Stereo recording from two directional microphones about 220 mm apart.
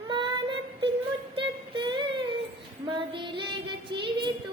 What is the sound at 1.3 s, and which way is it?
Music, 25° right (ahead or behind).